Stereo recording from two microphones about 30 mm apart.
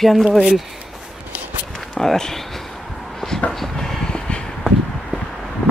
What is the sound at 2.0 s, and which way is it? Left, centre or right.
Speech, centre.